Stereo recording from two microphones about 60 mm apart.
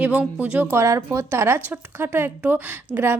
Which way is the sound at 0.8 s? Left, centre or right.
Right.